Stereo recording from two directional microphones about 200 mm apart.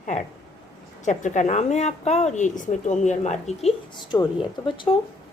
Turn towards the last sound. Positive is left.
turn(degrees=25)  # may be behind; listen again after turning